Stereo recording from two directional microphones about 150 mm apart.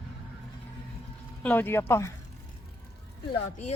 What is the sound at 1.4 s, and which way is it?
Speech, 10° left (ahead or behind).